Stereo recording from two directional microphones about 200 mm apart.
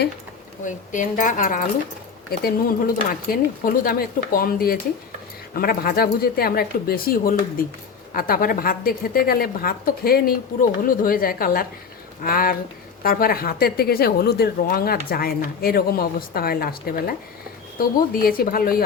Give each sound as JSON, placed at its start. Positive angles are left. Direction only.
{"t": 0.6, "sound": "a woman's voice", "side_deg": 40}